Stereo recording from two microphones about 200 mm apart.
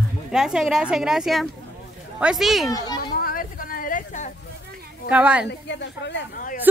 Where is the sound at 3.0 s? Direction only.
50° left (ahead or behind).